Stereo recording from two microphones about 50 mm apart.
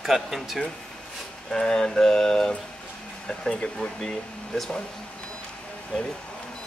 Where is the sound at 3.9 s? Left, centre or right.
Centre.